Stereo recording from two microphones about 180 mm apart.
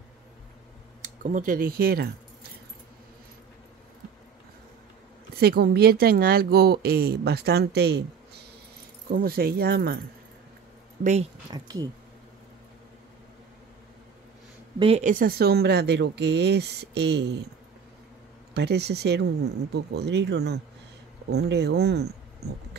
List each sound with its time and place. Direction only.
1.0 s speech: 45° right (ahead or behind)
5.4 s speech: 60° right (ahead or behind)
9.1 s speech: 55° right (ahead or behind)
11.5 s speech: 20° right (ahead or behind)
14.8 s speech: 35° right (ahead or behind); by 17.5 s 70° right (ahead or behind)
18.5 s speech: 65° right (ahead or behind)